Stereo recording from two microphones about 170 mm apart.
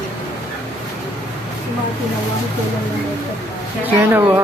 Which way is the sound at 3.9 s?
10° right (ahead or behind).